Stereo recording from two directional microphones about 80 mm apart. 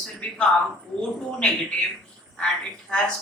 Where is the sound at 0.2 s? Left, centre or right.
Centre.